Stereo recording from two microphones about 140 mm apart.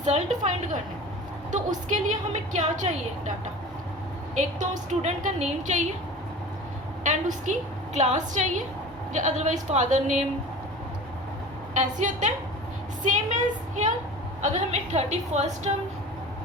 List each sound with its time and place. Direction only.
0.0 s a woman's voice: 60° right (ahead or behind)
4.4 s a woman's voice: 60° right (ahead or behind)
7.0 s a woman's voice: 65° right (ahead or behind)
11.7 s a woman's voice: 60° right (ahead or behind)